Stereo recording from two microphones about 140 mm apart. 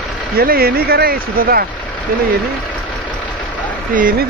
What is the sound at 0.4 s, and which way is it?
Speech, 90° right.